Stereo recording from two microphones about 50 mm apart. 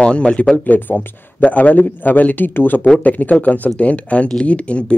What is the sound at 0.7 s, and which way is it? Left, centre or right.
Speech, left.